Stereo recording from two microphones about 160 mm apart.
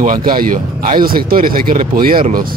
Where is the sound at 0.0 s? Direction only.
60° right (ahead or behind).